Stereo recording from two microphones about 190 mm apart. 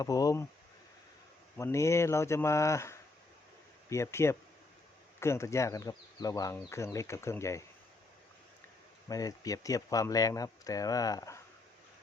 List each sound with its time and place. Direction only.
0.0 s speech: 20° left (ahead or behind)
1.5 s speech: 15° left (ahead or behind)
9.0 s speech: 20° left (ahead or behind)